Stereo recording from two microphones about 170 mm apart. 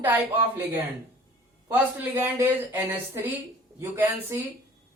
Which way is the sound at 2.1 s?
15° right (ahead or behind).